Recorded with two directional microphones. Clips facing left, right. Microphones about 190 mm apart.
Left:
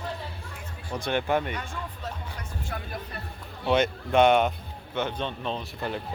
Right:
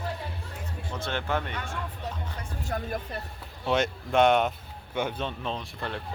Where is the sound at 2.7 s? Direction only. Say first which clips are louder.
Right 5 dB; 40° right (ahead or behind).